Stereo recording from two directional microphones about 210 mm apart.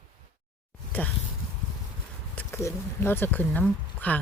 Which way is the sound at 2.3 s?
10° left (ahead or behind).